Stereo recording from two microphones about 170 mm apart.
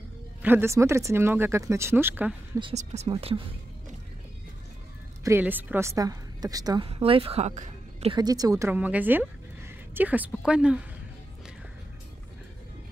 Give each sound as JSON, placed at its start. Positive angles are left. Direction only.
{"t": 0.4, "sound": "speech", "side_deg": -10}
{"t": 2.7, "sound": "speech", "side_deg": -40}
{"t": 5.2, "sound": "a woman's voice", "side_deg": -10}
{"t": 6.9, "sound": "a woman's voice", "side_deg": -35}
{"t": 8.2, "sound": "a woman's voice", "side_deg": -20}